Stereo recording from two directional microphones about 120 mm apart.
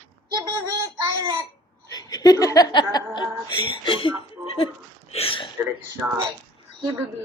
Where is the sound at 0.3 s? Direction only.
35° right (ahead or behind).